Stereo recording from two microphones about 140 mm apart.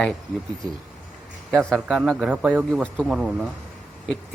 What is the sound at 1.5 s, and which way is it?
Speech, centre (ahead or behind).